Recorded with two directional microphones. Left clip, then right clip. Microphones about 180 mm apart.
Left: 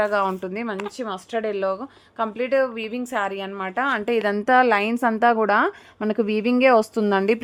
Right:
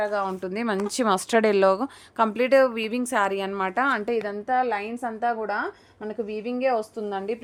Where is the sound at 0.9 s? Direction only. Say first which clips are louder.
Right 6 dB; 35° right (ahead or behind); by 4.0 s 5° right (ahead or behind).